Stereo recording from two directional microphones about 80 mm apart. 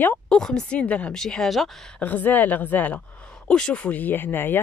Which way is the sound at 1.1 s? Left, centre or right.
Centre.